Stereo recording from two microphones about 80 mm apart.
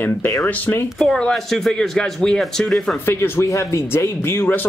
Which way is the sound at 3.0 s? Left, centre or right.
Left.